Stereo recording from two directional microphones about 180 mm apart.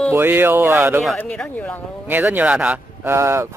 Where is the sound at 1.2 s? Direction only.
5° left (ahead or behind).